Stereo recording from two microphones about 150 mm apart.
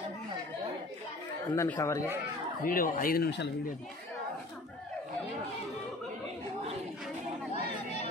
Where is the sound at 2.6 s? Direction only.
70° left (ahead or behind).